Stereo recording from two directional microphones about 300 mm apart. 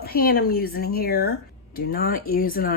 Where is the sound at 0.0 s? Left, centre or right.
Left.